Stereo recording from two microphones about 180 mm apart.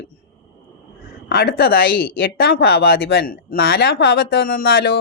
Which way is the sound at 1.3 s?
60° left (ahead or behind).